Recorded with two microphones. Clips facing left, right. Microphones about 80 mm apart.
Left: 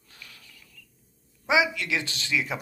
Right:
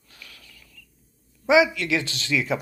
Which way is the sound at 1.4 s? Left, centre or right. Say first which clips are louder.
Right 5 dB; centre.